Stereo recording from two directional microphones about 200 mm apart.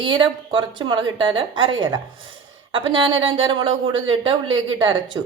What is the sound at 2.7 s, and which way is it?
A woman's voice, 25° right (ahead or behind).